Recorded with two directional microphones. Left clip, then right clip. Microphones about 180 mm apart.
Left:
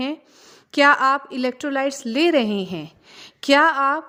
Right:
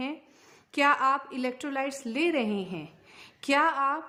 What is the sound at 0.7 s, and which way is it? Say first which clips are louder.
A woman's voice: left 8 dB; 35° left (ahead or behind).